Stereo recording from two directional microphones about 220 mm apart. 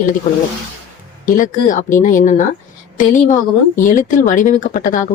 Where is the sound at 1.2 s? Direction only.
35° left (ahead or behind).